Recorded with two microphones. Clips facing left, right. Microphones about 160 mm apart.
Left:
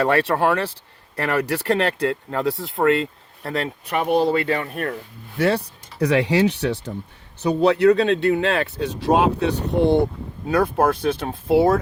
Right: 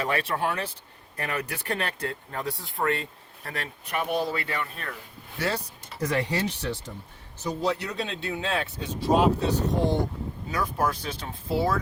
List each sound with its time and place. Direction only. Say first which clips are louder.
0.0 s speech: left 9 dB; 65° left (ahead or behind)
3.4 s speech: left 10 dB; 55° left (ahead or behind)